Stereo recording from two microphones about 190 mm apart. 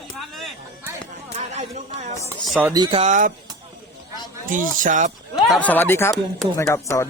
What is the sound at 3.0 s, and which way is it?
Speech, 40° right (ahead or behind).